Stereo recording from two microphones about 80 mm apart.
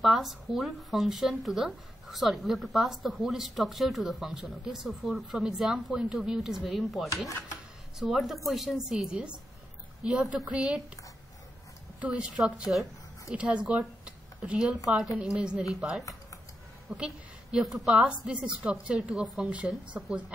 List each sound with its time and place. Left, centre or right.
0.0 s a woman's voice: centre
12.0 s a woman's voice: centre
13.7 s a sound: centre
15.2 s a woman's voice: centre